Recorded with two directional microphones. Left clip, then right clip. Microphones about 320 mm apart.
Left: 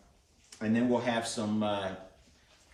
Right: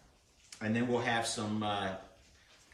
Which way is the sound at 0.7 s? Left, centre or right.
Centre.